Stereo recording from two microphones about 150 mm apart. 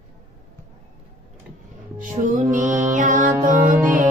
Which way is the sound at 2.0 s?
60° right (ahead or behind).